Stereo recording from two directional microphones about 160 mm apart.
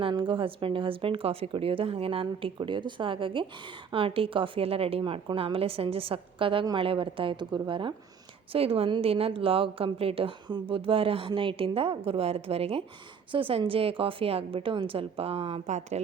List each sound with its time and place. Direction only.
0.0 s a woman's voice: 30° right (ahead or behind); by 16.0 s 45° right (ahead or behind)